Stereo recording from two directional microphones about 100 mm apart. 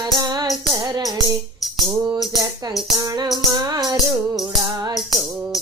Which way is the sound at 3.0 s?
40° right (ahead or behind).